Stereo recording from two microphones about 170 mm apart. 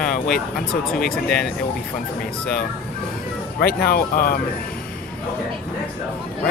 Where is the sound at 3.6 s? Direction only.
60° left (ahead or behind).